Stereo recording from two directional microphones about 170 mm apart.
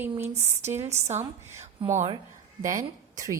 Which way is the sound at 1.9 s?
35° right (ahead or behind).